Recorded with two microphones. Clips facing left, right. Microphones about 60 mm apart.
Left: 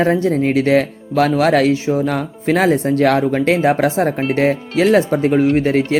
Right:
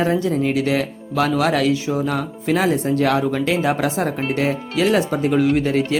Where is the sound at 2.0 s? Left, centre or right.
Left.